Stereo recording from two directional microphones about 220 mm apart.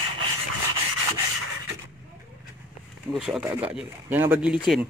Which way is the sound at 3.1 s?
Centre (ahead or behind).